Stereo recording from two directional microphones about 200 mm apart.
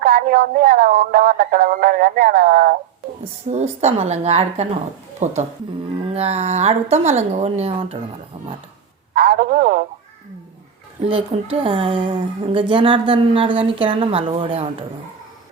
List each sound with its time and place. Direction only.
0.0 s speech: 50° right (ahead or behind)
3.5 s a woman's voice: 35° right (ahead or behind)
9.1 s a sound: 45° right (ahead or behind)
11.5 s a woman's voice: 25° right (ahead or behind)